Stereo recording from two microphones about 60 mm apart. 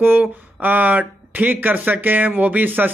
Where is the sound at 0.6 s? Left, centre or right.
Right.